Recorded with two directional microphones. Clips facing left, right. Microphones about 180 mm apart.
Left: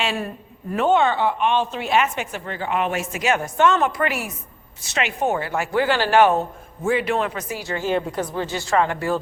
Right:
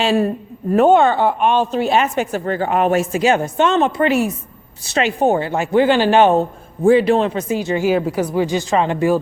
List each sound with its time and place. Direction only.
0.0 s a man's voice: 35° right (ahead or behind)
0.7 s a woman's voice: 45° right (ahead or behind); by 7.9 s 20° right (ahead or behind)
7.9 s speech: 5° right (ahead or behind)